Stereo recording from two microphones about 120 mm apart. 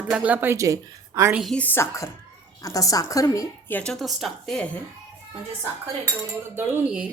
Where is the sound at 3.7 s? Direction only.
5° left (ahead or behind).